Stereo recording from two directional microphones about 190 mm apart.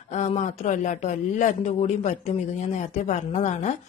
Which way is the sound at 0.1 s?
40° left (ahead or behind).